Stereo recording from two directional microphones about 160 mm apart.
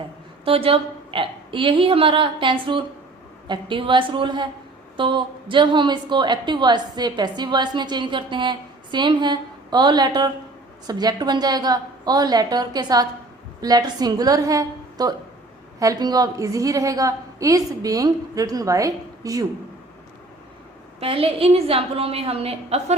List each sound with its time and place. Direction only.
0.4 s a woman's voice: 35° right (ahead or behind)
21.0 s a woman's voice: 35° right (ahead or behind)